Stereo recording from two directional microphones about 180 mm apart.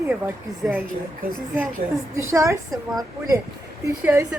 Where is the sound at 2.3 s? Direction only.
15° right (ahead or behind).